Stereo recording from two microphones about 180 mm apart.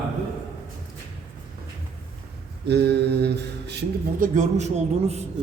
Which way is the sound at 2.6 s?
70° right (ahead or behind).